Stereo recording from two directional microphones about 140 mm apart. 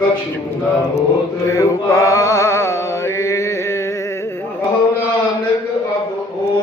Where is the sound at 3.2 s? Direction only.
20° left (ahead or behind).